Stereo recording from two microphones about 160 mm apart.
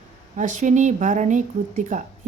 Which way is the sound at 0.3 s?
50° right (ahead or behind).